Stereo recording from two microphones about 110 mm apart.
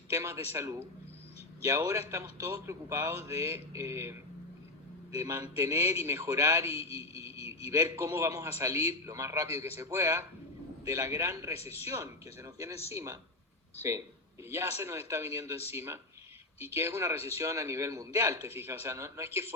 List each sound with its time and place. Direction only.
0.1 s a man's voice: 25° right (ahead or behind)
11.6 s speech: 65° left (ahead or behind)
11.9 s a man's voice: 25° right (ahead or behind)
14.5 s a man's voice: 25° right (ahead or behind)